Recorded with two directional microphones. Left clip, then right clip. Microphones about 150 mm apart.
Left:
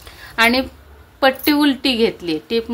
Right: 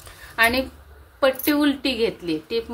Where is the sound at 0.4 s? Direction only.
30° left (ahead or behind).